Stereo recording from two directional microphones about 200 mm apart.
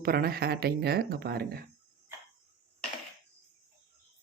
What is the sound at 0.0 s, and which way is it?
Speech, 50° right (ahead or behind).